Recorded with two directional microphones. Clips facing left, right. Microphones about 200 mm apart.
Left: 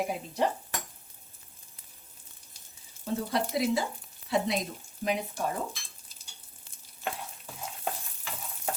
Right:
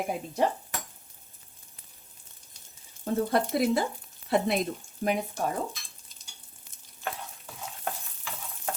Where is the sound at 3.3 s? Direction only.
55° right (ahead or behind).